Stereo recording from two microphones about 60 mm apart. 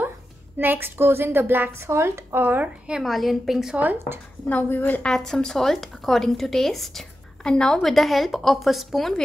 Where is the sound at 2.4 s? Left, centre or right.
Right.